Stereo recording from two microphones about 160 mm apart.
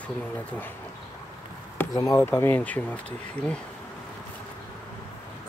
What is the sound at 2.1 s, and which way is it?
Speech, 15° left (ahead or behind).